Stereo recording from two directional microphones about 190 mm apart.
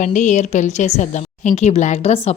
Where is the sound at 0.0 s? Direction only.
40° left (ahead or behind).